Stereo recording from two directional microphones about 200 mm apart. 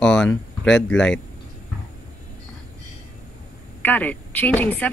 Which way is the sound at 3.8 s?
10° left (ahead or behind).